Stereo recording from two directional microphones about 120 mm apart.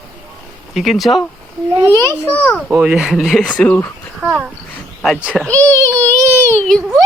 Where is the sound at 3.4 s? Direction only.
10° left (ahead or behind).